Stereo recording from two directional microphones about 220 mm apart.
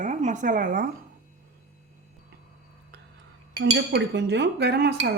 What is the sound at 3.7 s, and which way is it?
Chink, 50° right (ahead or behind).